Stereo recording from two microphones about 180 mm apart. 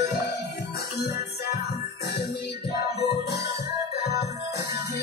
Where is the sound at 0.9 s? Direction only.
70° left (ahead or behind).